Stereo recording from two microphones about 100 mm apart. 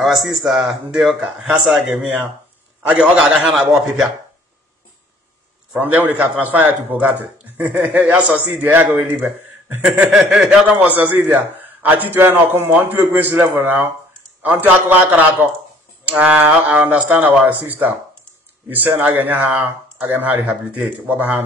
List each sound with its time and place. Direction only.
0.0 s speech: centre (ahead or behind)
5.8 s a man's voice: 15° right (ahead or behind)
10.8 s a man's voice: 15° right (ahead or behind)